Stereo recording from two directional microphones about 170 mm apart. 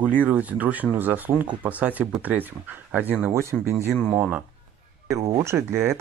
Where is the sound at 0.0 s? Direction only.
10° right (ahead or behind).